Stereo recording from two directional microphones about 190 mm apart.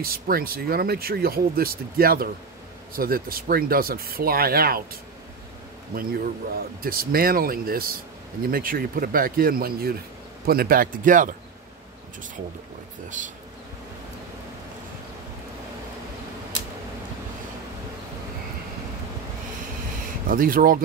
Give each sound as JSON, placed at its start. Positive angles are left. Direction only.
{"t": 0.0, "sound": "speech", "side_deg": -50}
{"t": 5.9, "sound": "speech", "side_deg": -50}
{"t": 13.2, "sound": "bee", "side_deg": -40}
{"t": 20.2, "sound": "speech", "side_deg": -50}